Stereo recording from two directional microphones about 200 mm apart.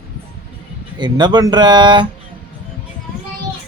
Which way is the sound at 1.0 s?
20° right (ahead or behind).